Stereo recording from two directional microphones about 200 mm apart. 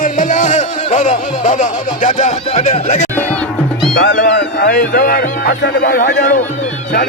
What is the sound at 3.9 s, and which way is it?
Speech, 55° left (ahead or behind).